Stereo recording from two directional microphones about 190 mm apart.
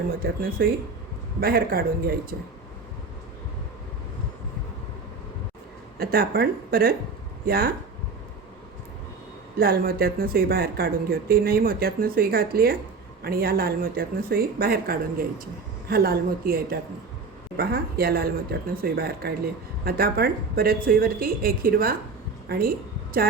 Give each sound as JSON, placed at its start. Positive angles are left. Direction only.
{"t": 0.1, "sound": "speech", "side_deg": -50}
{"t": 6.0, "sound": "speech", "side_deg": -55}
{"t": 9.6, "sound": "speech", "side_deg": -55}